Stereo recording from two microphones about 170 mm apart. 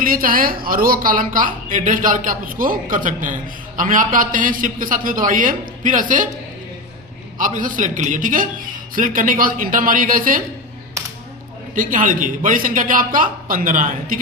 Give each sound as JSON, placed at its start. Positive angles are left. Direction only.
{"t": 0.0, "sound": "a woman's voice", "side_deg": -55}
{"t": 7.3, "sound": "a woman's voice", "side_deg": -50}
{"t": 11.7, "sound": "a woman's voice", "side_deg": -50}